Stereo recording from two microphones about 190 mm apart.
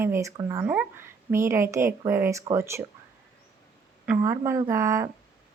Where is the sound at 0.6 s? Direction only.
5° right (ahead or behind).